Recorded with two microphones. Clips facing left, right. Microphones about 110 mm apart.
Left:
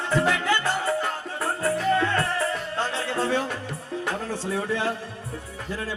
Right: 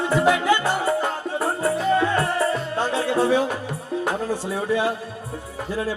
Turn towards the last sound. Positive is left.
turn(degrees=-15)  # may be behind; listen again after turning